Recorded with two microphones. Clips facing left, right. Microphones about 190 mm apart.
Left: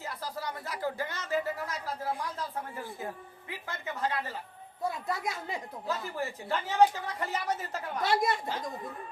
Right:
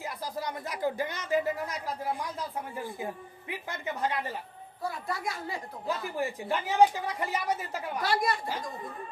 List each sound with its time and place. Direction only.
0.0 s a woman's voice: 15° right (ahead or behind)
3.5 s a woman's voice: 15° right (ahead or behind)
4.8 s a woman's voice: 20° left (ahead or behind)
5.9 s a woman's voice: 15° right (ahead or behind)
8.0 s a woman's voice: 25° left (ahead or behind)